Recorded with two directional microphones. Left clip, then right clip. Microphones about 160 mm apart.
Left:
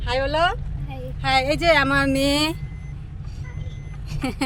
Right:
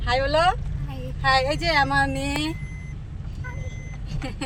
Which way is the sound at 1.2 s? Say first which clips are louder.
Left 2 dB; 40° left (ahead or behind).